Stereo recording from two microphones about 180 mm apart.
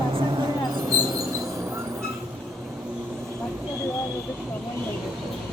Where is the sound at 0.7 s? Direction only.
20° right (ahead or behind).